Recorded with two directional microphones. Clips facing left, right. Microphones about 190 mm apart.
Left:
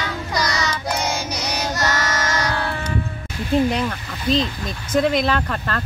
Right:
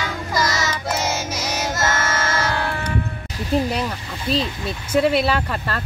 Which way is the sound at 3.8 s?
10° right (ahead or behind).